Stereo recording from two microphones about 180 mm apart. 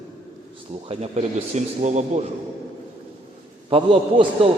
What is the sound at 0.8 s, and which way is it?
A man's voice, 35° right (ahead or behind).